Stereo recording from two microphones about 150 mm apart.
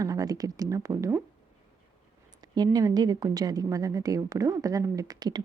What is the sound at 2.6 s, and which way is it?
A woman's voice, 25° right (ahead or behind).